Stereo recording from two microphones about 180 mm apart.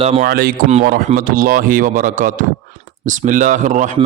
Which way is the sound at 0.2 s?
55° right (ahead or behind).